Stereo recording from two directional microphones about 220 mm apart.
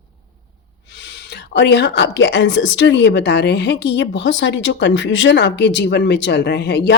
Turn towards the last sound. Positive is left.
turn(degrees=50)  # may be behind; listen again after turning